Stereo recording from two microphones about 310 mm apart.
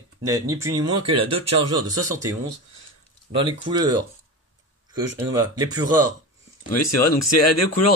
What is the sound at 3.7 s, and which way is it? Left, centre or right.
Speech, centre.